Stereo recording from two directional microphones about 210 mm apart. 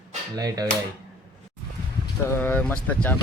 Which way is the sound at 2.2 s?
10° left (ahead or behind).